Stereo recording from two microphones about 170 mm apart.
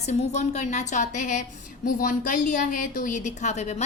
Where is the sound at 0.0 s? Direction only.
40° left (ahead or behind).